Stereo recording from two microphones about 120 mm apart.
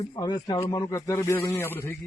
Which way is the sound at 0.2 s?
35° left (ahead or behind).